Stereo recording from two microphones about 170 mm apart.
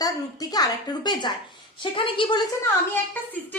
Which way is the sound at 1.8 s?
30° left (ahead or behind).